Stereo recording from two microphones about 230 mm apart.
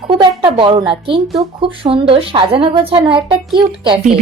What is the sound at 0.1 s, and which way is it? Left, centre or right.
A woman's voice, right.